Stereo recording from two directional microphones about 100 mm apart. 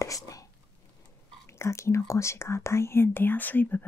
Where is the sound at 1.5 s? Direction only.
25° left (ahead or behind).